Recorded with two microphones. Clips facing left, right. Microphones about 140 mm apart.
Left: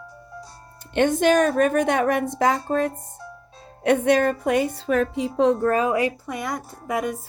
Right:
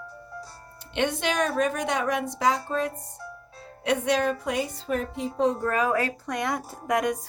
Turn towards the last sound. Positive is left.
turn(degrees=5)  # may be behind; listen again after turning